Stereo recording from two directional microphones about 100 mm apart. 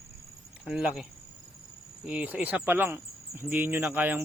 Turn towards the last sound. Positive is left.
turn(degrees=-20)  # may be behind; listen again after turning